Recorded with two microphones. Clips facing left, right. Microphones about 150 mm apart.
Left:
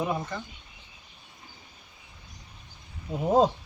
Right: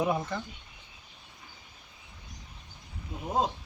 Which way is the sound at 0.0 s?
5° right (ahead or behind).